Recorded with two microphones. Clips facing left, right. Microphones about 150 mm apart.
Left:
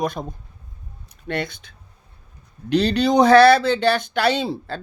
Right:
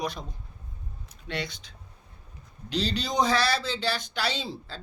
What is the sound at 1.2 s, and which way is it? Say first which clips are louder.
Speech: left 8 dB; 50° left (ahead or behind).